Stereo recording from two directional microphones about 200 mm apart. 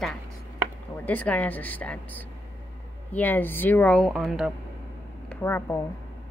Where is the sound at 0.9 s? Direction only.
10° left (ahead or behind).